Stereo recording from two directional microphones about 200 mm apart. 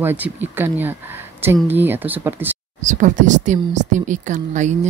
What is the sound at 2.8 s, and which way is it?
Speech, 40° right (ahead or behind).